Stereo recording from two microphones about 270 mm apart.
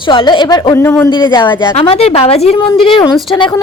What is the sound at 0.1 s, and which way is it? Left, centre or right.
A woman's voice, centre.